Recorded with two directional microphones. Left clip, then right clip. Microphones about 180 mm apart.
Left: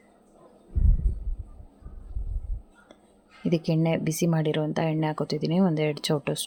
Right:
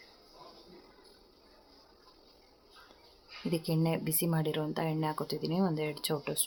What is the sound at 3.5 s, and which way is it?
Speech, 35° left (ahead or behind).